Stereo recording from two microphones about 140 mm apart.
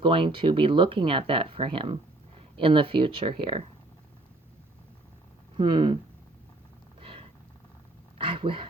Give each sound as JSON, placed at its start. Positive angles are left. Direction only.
{"t": 0.0, "sound": "speech", "side_deg": -35}
{"t": 5.5, "sound": "speech", "side_deg": -35}
{"t": 7.0, "sound": "a sound", "side_deg": -40}
{"t": 8.2, "sound": "speech", "side_deg": -40}